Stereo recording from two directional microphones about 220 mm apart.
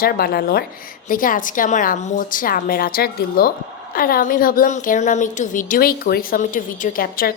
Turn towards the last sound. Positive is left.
turn(degrees=40)  # may be behind; listen again after turning